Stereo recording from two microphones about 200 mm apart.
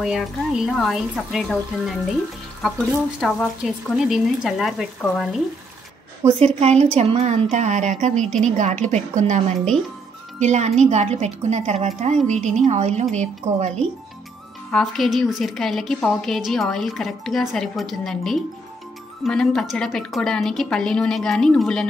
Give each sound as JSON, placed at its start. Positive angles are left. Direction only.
{"t": 0.0, "sound": "a woman's voice", "side_deg": 0}
{"t": 3.2, "sound": "a woman's voice", "side_deg": 0}
{"t": 6.2, "sound": "a woman's voice", "side_deg": -30}
{"t": 10.4, "sound": "a woman's voice", "side_deg": -35}
{"t": 14.7, "sound": "a woman's voice", "side_deg": 0}